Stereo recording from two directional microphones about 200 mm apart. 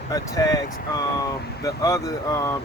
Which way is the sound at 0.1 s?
15° left (ahead or behind).